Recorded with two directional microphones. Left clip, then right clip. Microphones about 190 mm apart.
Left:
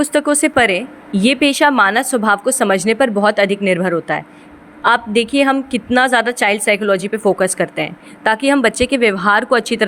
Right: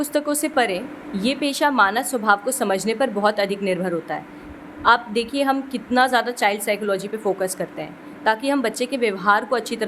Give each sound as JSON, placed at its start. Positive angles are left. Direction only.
{"t": 0.0, "sound": "a woman's voice", "side_deg": 35}